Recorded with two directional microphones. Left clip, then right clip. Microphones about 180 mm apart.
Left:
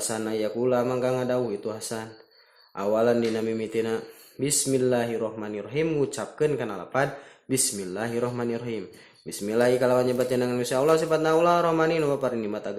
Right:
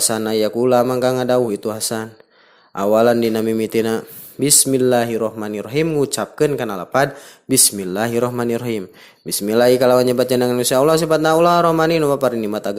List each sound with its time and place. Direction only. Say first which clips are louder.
0.1 s a man's voice: right 10 dB; 45° right (ahead or behind)